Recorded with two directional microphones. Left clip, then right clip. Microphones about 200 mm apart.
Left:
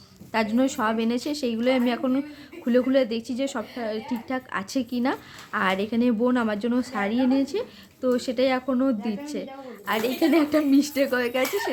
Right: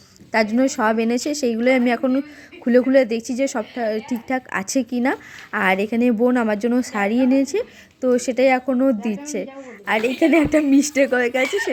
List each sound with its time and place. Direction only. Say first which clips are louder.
0.3 s speech: right 5 dB; 25° right (ahead or behind)
4.8 s speech: right 6 dB; 60° right (ahead or behind)
5.0 s speech: right 5 dB; 25° right (ahead or behind)